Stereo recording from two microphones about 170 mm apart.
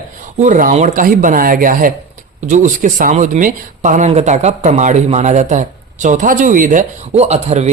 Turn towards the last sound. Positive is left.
turn(degrees=-40)  # may be behind; listen again after turning